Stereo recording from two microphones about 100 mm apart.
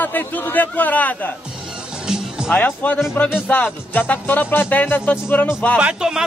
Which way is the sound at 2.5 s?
15° left (ahead or behind).